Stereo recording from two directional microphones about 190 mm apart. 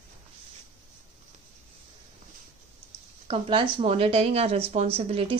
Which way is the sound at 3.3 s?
25° right (ahead or behind).